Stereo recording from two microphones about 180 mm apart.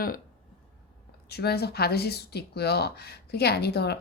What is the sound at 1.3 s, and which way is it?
Speech, 65° left (ahead or behind).